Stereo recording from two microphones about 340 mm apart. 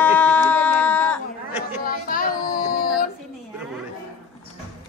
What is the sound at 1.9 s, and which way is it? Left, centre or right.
Child singing, left.